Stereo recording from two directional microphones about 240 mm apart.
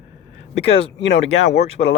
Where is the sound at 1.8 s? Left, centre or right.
Left.